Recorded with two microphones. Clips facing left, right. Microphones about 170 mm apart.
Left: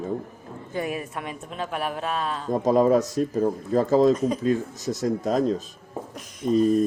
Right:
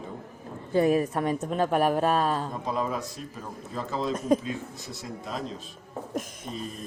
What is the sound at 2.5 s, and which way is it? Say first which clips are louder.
Speech: left 11 dB; 45° left (ahead or behind).